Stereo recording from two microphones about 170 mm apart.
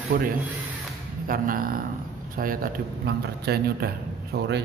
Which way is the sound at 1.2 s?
55° right (ahead or behind).